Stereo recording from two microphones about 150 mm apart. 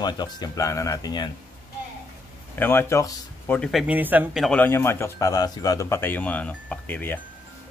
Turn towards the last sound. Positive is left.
turn(degrees=10)  # may be behind; listen again after turning